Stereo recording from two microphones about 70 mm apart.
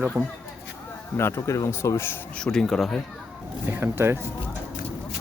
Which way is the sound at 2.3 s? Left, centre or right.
Centre.